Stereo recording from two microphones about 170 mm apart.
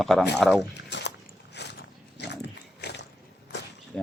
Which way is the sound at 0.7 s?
90° left.